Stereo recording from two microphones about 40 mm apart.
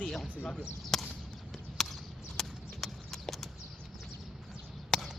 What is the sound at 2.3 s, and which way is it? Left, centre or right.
Clip-clop, centre.